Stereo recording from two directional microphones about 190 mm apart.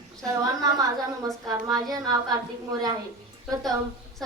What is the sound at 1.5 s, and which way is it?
A woman's voice, 20° right (ahead or behind).